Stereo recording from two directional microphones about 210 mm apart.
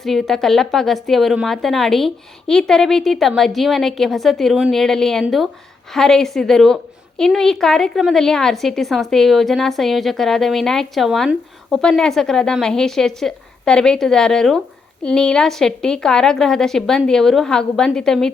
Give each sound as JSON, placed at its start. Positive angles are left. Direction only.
{"t": 0.0, "sound": "a woman's voice", "side_deg": 0}